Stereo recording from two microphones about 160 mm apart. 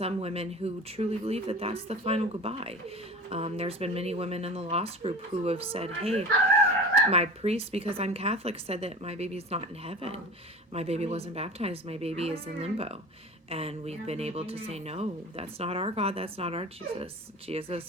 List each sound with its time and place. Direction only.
0.0 s speech: 40° right (ahead or behind)